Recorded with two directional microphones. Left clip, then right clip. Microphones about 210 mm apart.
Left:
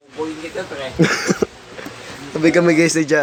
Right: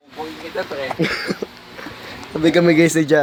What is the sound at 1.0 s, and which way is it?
Speech, 50° left (ahead or behind).